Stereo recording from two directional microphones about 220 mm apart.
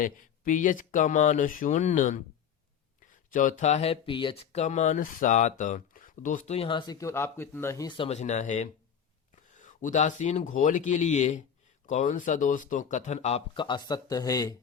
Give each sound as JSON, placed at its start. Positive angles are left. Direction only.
{"t": 0.0, "sound": "speech", "side_deg": 35}